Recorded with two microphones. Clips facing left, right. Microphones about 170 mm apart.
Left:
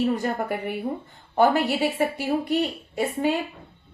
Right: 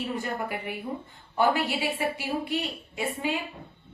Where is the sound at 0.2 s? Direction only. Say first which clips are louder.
Left 5 dB; 45° left (ahead or behind).